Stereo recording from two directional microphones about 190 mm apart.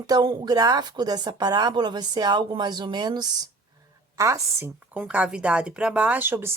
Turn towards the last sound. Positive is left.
turn(degrees=-10)  # may be behind; listen again after turning